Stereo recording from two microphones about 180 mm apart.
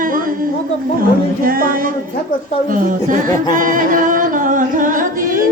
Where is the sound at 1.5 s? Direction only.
55° right (ahead or behind).